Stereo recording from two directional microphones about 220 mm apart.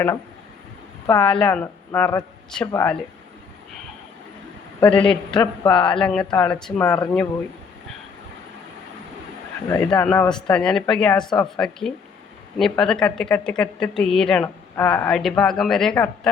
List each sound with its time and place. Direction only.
1.2 s a man's voice: 5° left (ahead or behind)
4.9 s a woman's voice: 5° left (ahead or behind)
9.6 s a man's voice: 15° left (ahead or behind)